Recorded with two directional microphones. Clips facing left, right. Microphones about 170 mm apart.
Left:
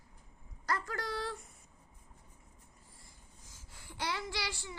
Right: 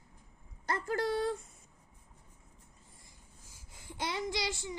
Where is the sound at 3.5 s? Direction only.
20° right (ahead or behind).